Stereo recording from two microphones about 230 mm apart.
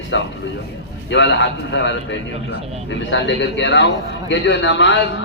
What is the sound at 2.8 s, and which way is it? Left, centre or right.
A man's voice, left.